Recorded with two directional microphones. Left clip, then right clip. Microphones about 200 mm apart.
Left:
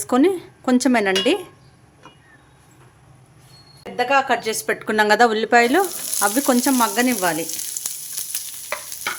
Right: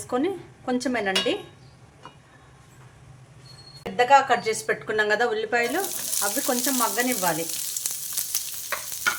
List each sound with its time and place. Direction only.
0.1 s a woman's voice: 60° left (ahead or behind)
3.9 s a woman's voice: 30° left (ahead or behind); by 7.3 s 60° left (ahead or behind)